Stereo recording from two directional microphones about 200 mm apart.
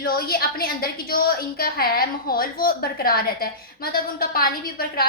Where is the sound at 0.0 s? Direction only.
50° left (ahead or behind).